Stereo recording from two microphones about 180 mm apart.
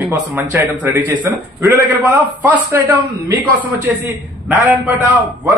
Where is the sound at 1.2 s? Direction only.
20° right (ahead or behind).